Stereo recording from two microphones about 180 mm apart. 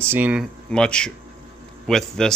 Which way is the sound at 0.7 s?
5° left (ahead or behind).